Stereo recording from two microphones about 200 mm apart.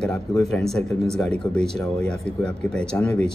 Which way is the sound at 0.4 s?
Centre (ahead or behind).